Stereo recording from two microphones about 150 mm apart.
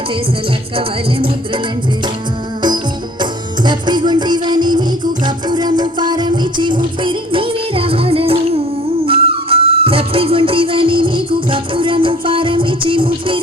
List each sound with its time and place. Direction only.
0.8 s music: 35° right (ahead or behind)